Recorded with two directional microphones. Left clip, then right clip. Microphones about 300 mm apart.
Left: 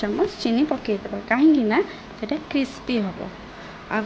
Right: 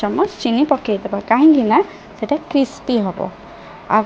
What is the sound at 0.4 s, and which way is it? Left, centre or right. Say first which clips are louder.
A woman's voice: right 6 dB; centre.